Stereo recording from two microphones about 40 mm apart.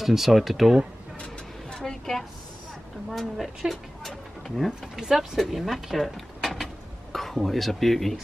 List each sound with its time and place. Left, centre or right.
0.0 s speech: centre
1.2 s vehicle: centre
3.1 s speech: centre
5.0 s speech: centre